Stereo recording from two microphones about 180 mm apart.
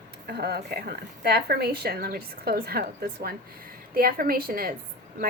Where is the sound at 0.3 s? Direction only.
60° right (ahead or behind).